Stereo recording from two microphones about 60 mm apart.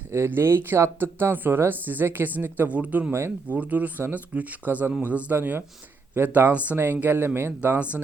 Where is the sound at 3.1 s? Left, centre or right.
Right.